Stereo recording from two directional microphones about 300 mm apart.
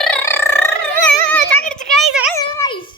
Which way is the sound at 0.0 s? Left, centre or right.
Centre.